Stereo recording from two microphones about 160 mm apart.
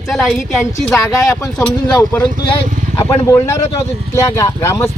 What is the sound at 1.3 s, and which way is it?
Speech, 20° left (ahead or behind).